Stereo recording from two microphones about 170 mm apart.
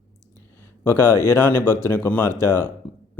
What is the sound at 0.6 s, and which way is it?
A man's voice, 15° left (ahead or behind).